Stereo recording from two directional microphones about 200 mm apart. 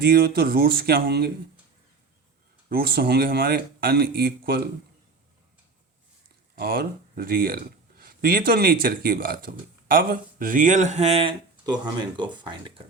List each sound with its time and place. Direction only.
0.0 s speech: 50° right (ahead or behind)
2.6 s speech: 50° right (ahead or behind)
6.6 s speech: 50° right (ahead or behind); by 12.8 s 20° right (ahead or behind)